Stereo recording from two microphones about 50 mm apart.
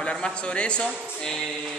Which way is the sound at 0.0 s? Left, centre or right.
Centre.